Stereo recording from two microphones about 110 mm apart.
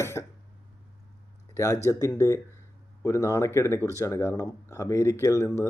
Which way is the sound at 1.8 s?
30° left (ahead or behind).